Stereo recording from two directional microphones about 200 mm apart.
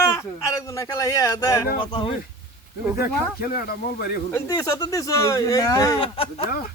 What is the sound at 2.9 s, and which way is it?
Speech, 50° left (ahead or behind).